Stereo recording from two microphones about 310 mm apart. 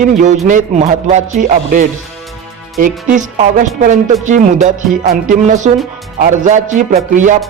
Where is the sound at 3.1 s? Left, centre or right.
Right.